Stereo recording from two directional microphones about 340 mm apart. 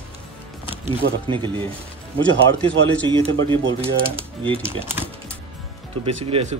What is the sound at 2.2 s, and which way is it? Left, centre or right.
Speech, centre.